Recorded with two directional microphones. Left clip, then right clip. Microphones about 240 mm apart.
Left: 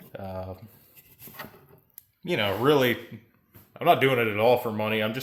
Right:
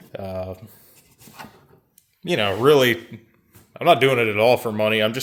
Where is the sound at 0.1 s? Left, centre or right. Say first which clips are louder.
Right 7 dB; right.